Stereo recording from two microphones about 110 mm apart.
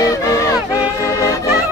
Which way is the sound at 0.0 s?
30° left (ahead or behind).